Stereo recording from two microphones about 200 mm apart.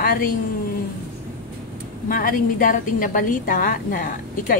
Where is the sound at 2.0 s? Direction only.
45° left (ahead or behind).